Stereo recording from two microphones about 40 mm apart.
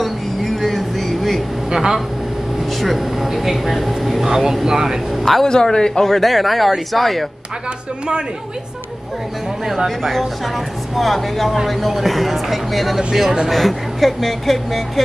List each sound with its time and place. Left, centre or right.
0.0 s a sound: centre
1.7 s speech: centre
2.8 s speech: centre
5.2 s speech: centre
5.5 s speech: centre
9.8 s speech: centre